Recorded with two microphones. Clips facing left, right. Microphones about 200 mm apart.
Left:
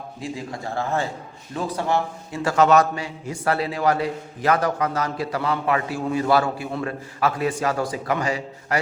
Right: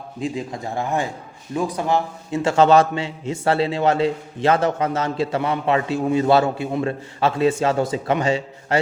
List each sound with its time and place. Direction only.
0.2 s a man's voice: 20° right (ahead or behind)